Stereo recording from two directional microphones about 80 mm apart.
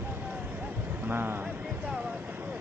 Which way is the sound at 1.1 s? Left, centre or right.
Right.